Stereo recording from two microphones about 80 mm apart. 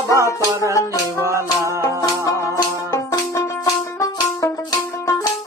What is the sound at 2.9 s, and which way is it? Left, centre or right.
Music, left.